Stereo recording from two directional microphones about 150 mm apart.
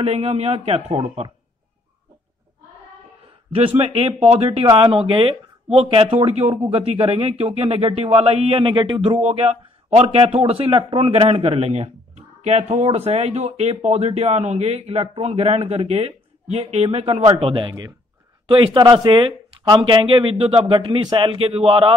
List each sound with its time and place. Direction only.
0.0 s a man's voice: 45° right (ahead or behind)
3.5 s a man's voice: 40° right (ahead or behind)